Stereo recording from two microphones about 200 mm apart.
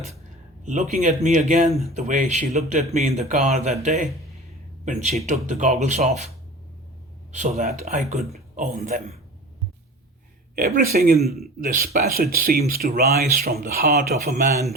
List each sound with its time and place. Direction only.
0.6 s speech: 35° right (ahead or behind)
10.5 s speech: 50° right (ahead or behind)